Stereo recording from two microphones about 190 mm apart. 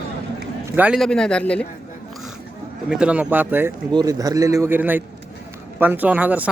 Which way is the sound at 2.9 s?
5° right (ahead or behind).